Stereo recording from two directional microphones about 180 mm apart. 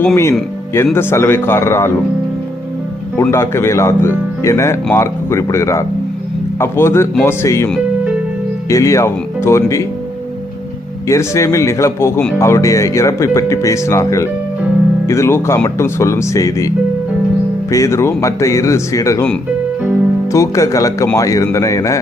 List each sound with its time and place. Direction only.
0.0 s speech: 15° left (ahead or behind)
3.2 s speech: 15° left (ahead or behind)
8.7 s speech: 15° left (ahead or behind)
11.1 s speech: 15° left (ahead or behind)
20.3 s speech: 15° left (ahead or behind)